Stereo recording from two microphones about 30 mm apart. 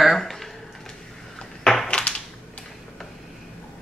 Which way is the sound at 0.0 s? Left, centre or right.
Centre.